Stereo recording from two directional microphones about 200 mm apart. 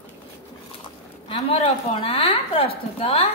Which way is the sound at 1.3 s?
25° left (ahead or behind).